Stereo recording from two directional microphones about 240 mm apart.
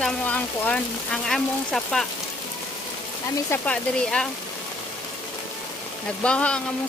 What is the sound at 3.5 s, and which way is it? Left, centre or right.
Speech, centre.